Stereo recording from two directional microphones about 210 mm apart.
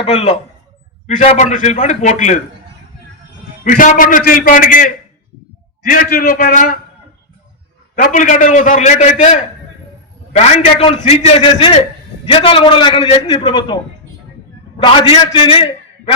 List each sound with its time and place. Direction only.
0.0 s a man's voice: 30° left (ahead or behind)
3.6 s a man's voice: 40° left (ahead or behind)
8.0 s a man's voice: 35° left (ahead or behind)
14.8 s a man's voice: 25° left (ahead or behind)